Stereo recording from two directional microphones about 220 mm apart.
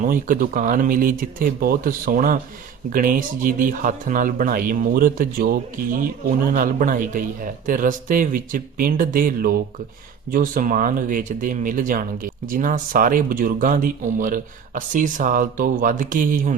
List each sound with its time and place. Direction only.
0.0 s speech: 40° right (ahead or behind)